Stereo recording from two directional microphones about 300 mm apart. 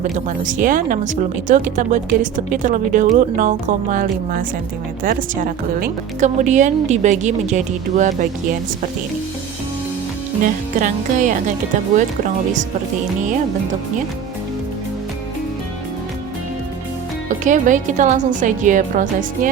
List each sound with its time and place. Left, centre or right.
0.0 s speech: right
10.4 s speech: right
17.2 s speech: right